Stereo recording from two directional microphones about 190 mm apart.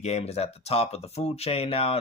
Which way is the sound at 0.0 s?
35° left (ahead or behind).